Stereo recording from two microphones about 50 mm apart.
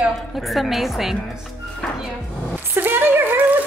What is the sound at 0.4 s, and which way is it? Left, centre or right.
Speech, centre.